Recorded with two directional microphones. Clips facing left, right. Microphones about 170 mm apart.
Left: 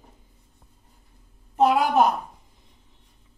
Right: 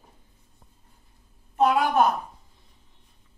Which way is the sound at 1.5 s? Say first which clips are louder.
Left 2 dB; 20° left (ahead or behind).